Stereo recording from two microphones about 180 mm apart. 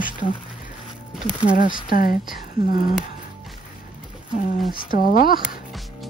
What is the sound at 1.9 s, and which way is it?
Speech, 55° left (ahead or behind).